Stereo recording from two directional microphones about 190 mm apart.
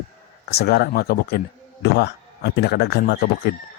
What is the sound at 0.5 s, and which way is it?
Speech, 55° left (ahead or behind).